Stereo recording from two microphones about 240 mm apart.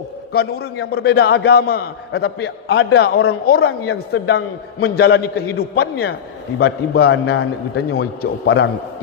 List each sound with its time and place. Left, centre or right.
0.3 s a man's voice: left
3.6 s speech: left
4.1 s a man's voice: left